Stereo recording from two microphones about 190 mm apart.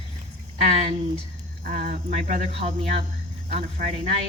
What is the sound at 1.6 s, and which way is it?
Speech, 50° right (ahead or behind).